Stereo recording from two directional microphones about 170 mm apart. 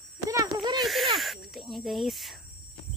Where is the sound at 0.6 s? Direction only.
25° right (ahead or behind).